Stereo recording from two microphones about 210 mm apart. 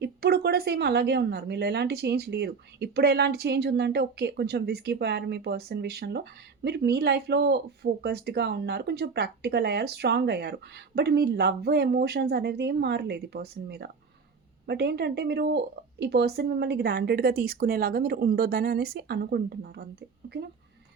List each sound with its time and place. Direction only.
0.0 s speech: 50° right (ahead or behind)